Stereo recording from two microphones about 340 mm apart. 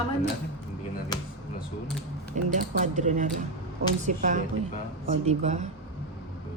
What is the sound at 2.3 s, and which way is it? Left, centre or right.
Speech, right.